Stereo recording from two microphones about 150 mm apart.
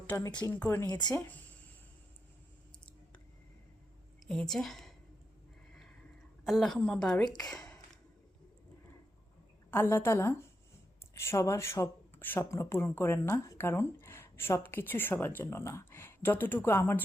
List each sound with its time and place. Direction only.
0.1 s speech: 15° left (ahead or behind)
0.9 s speech: 30° left (ahead or behind)
4.3 s a woman's voice: 5° left (ahead or behind)
6.4 s a woman's voice: centre (ahead or behind)
9.7 s speech: 15° left (ahead or behind)